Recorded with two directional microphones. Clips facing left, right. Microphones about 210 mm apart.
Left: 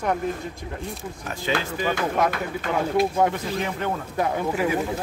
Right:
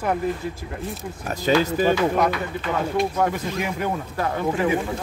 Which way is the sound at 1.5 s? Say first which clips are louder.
Right 7 dB; 40° right (ahead or behind).